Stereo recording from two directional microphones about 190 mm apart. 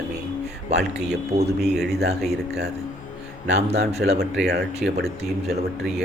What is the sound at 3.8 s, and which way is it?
Speech, 60° right (ahead or behind).